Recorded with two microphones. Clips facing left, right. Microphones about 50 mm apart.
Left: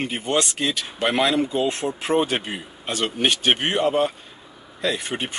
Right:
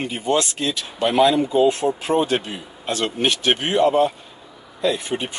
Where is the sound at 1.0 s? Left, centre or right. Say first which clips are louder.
Right 5 dB; centre.